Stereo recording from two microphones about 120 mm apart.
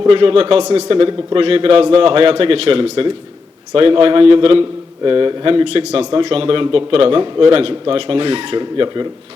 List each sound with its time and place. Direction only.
0.1 s a man's voice: 50° right (ahead or behind)